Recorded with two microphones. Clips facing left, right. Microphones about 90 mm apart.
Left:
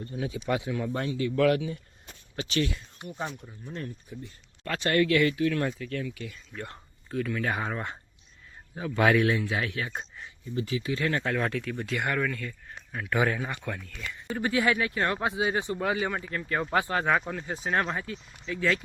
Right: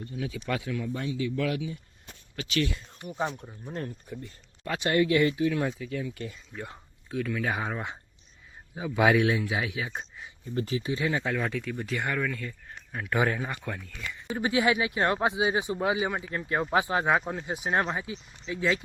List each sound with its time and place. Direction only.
0.0 s speech: 35° left (ahead or behind)
0.8 s speech: 50° left (ahead or behind)
2.3 s speech: 25° left (ahead or behind)
3.1 s speech: 20° right (ahead or behind)
3.7 s speech: 35° right (ahead or behind)
4.6 s speech: 15° right (ahead or behind)
10.4 s speech: 50° right (ahead or behind)
11.0 s speech: 5° right (ahead or behind)
12.3 s speech: 15° right (ahead or behind)
13.5 s speech: 5° right (ahead or behind)
14.3 s speech: 15° right (ahead or behind)